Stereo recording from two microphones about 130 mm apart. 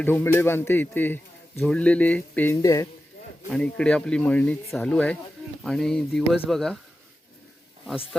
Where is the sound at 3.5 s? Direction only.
5° left (ahead or behind).